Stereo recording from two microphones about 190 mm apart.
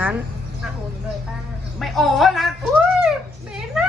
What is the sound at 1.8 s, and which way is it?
Speech, centre (ahead or behind).